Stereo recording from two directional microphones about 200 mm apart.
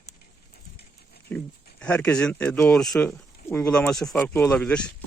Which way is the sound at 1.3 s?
5° left (ahead or behind).